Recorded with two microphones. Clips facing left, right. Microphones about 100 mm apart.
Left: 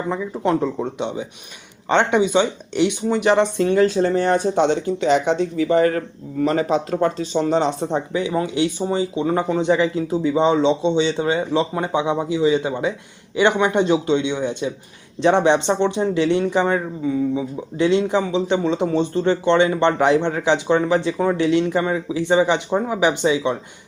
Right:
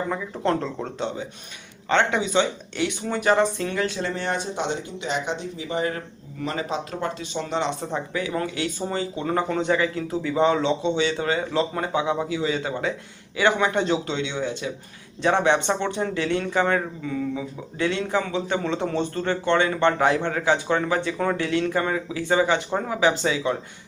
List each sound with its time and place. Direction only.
0.1 s speech: 15° left (ahead or behind); by 6.0 s 55° left (ahead or behind)
6.4 s speech: 45° left (ahead or behind)
7.9 s speech: 25° left (ahead or behind)